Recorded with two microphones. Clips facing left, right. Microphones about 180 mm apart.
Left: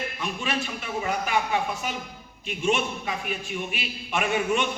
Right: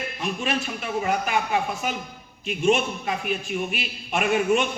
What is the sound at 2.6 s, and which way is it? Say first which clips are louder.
A man's voice: right 4 dB; 45° right (ahead or behind).